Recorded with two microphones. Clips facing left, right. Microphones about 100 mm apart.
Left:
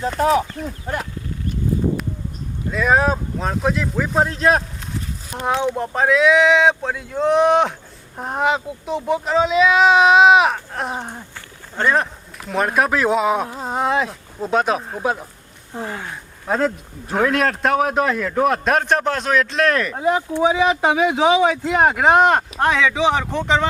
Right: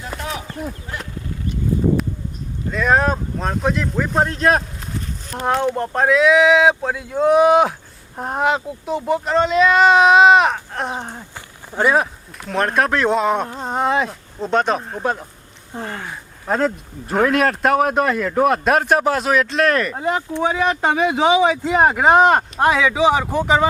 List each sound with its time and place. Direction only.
0.2 s speech: 40° left (ahead or behind)
2.7 s speech: centre (ahead or behind)
11.3 s a sound: 10° right (ahead or behind)
12.5 s speech: 5° left (ahead or behind)